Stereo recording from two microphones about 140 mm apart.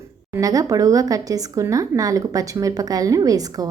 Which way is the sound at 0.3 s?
25° right (ahead or behind).